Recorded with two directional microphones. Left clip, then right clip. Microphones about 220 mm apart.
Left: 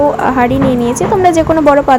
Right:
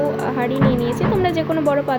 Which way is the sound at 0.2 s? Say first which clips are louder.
Left 9 dB; 20° left (ahead or behind).